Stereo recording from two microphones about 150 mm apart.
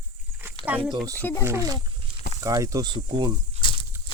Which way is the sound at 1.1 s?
15° left (ahead or behind).